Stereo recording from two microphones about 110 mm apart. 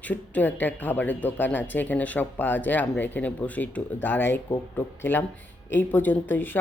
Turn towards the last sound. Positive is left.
turn(degrees=15)  # may be behind; listen again after turning